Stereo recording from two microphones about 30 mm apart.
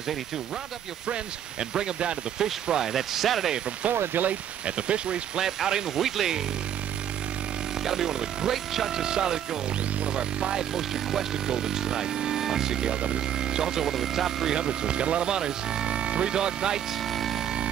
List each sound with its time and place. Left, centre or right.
2.3 s speech: centre
4.1 s speech: right
4.6 s speech: right
5.4 s speech: centre
5.9 s speech: centre
7.8 s speech: centre
9.0 s speech: right
10.7 s speech: centre
13.0 s speech: right; by 14.6 s centre
14.6 s speech: right
17.1 s a sound: centre